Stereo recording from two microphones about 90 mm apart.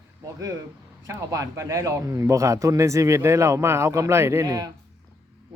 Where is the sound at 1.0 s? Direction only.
35° right (ahead or behind).